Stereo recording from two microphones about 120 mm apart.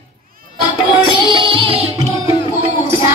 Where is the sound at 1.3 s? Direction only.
45° right (ahead or behind).